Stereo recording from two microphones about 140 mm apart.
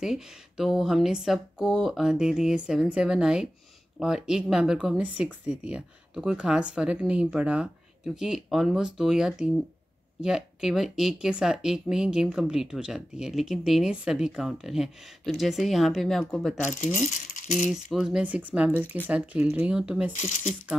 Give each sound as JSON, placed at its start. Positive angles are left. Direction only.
{"t": 0.0, "sound": "speech", "side_deg": -5}
{"t": 16.8, "sound": "rattle", "side_deg": 55}
{"t": 17.6, "sound": "speech", "side_deg": -5}
{"t": 20.2, "sound": "speech", "side_deg": 55}